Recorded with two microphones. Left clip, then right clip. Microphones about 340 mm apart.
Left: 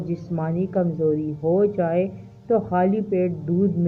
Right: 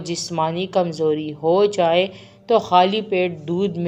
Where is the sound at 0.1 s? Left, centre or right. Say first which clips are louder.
Right 8 dB; right.